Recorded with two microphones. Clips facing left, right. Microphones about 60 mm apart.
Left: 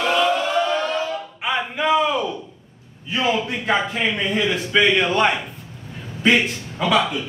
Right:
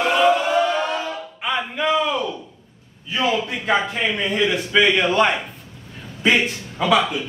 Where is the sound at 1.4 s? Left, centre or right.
Centre.